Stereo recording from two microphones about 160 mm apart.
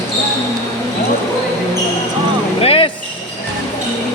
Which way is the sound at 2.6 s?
35° left (ahead or behind).